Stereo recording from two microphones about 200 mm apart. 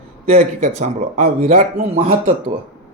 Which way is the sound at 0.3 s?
35° right (ahead or behind).